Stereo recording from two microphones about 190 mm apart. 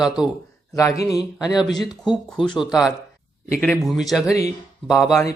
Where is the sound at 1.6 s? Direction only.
20° left (ahead or behind).